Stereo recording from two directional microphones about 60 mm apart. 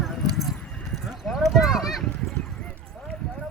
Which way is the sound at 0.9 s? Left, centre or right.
Centre.